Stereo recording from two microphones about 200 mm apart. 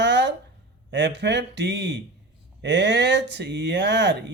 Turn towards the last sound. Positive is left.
turn(degrees=-60)  # may be behind; listen again after turning